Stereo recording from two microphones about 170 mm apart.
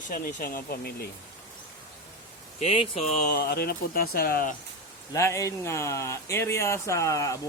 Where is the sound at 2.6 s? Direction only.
35° left (ahead or behind); by 4.6 s 55° left (ahead or behind).